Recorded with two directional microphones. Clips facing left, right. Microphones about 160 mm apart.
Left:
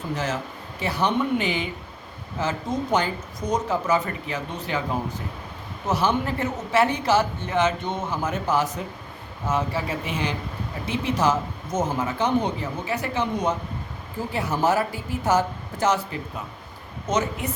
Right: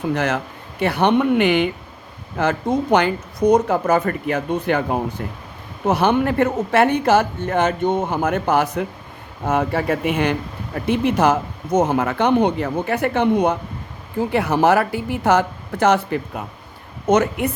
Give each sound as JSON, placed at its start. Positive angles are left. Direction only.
{"t": 0.1, "sound": "speech", "side_deg": -65}